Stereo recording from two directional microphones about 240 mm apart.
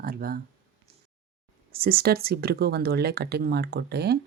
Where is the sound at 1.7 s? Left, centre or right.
Right.